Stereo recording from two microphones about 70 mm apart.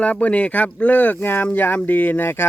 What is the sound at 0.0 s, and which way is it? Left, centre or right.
Speech, left.